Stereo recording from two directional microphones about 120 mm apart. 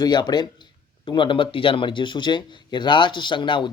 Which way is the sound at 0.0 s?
35° left (ahead or behind).